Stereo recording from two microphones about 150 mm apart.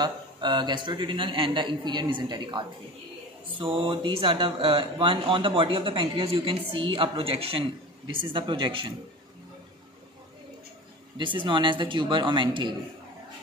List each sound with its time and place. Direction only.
0.0 s speech: 30° right (ahead or behind)
11.1 s speech: 30° right (ahead or behind)